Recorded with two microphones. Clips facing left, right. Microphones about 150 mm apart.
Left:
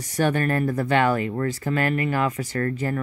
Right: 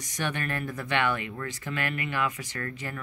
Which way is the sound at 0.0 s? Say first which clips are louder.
Left 10 dB; 40° left (ahead or behind).